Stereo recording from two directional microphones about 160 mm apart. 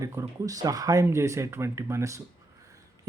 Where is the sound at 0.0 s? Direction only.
20° right (ahead or behind).